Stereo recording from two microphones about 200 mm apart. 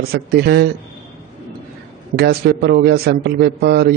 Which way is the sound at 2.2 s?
50° right (ahead or behind).